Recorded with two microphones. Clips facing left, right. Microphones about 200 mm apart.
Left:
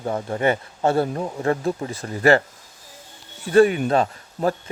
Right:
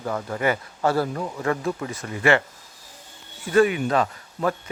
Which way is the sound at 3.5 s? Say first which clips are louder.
Left 3 dB; 35° left (ahead or behind).